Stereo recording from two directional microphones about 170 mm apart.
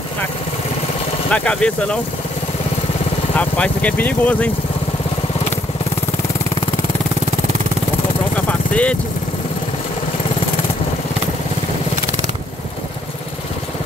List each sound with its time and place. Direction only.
1.3 s speech: 5° left (ahead or behind)
3.3 s speech: 10° left (ahead or behind)
8.5 s vehicle: 5° left (ahead or behind)